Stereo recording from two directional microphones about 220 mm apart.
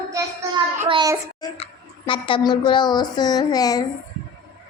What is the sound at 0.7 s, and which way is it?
Child singing, 20° right (ahead or behind).